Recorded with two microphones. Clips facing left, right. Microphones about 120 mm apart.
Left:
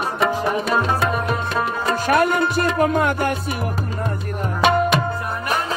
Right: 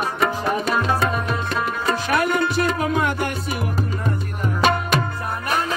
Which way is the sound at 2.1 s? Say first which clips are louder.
Left 4 dB; 50° left (ahead or behind).